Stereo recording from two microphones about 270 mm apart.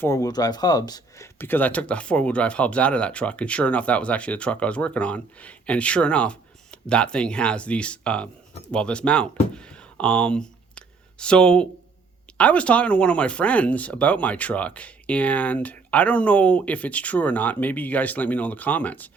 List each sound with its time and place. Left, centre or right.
0.0 s speech: centre